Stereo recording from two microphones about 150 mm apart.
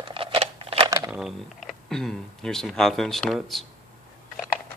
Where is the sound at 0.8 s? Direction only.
25° right (ahead or behind).